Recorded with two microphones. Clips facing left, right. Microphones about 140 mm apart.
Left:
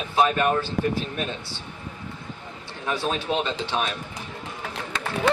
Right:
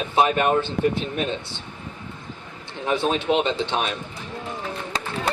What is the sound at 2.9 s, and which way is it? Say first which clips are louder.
Speech: right 4 dB; 25° right (ahead or behind).